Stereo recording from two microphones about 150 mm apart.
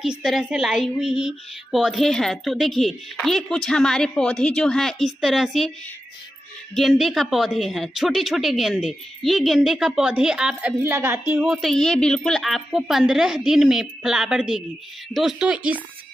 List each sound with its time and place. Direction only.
0.0 s speech: centre (ahead or behind)
6.7 s speech: centre (ahead or behind); by 11.4 s 15° right (ahead or behind)
11.4 s speech: centre (ahead or behind)